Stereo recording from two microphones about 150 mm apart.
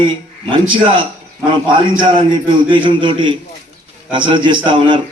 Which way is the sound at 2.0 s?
35° right (ahead or behind).